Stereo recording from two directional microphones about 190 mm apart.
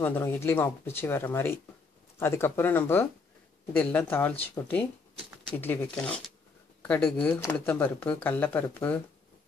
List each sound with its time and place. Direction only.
0.0 s speech: 10° left (ahead or behind)